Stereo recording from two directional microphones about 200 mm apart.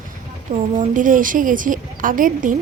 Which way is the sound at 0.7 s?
40° right (ahead or behind).